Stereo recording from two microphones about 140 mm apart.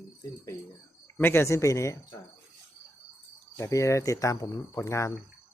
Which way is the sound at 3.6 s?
20° left (ahead or behind).